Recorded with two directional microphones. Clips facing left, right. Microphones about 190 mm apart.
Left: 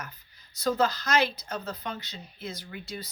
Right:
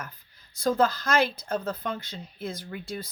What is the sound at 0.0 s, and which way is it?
A woman's voice, 50° right (ahead or behind).